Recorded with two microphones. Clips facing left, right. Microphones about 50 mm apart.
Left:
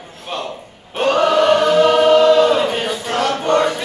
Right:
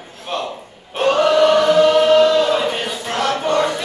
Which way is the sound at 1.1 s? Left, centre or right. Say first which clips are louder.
Even; left.